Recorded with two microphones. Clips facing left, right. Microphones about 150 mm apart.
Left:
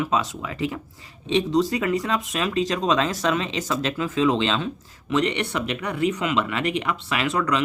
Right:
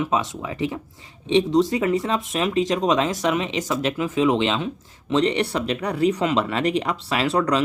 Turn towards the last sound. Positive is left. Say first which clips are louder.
# right 3 dB
turn(degrees=-35)  # may be behind; listen again after turning